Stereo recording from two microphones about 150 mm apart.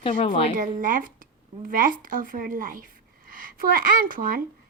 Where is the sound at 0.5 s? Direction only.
60° right (ahead or behind).